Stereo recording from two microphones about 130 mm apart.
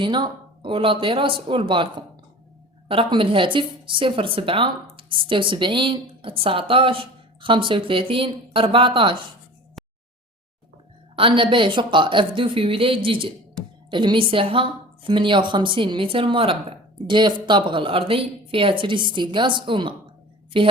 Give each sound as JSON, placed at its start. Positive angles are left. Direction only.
{"t": 0.0, "sound": "a woman's voice", "side_deg": -40}
{"t": 9.8, "sound": "a sound", "side_deg": 0}
{"t": 11.2, "sound": "a woman's voice", "side_deg": -40}